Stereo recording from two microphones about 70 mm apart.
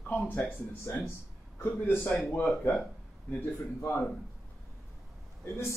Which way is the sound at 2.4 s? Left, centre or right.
Left.